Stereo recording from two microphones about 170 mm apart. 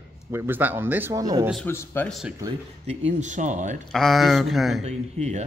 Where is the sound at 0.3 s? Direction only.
15° right (ahead or behind).